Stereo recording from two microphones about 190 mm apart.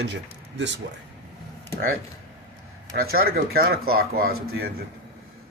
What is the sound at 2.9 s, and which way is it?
Speech, 50° right (ahead or behind).